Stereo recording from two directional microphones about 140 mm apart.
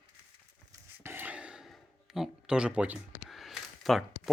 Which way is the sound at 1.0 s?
15° right (ahead or behind).